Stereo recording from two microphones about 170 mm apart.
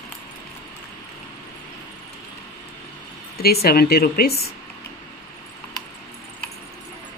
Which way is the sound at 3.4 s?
65° left (ahead or behind).